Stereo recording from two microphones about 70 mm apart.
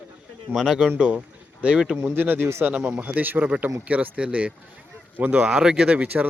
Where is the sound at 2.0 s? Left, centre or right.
Right.